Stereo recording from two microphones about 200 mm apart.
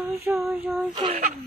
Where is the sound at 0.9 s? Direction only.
20° right (ahead or behind).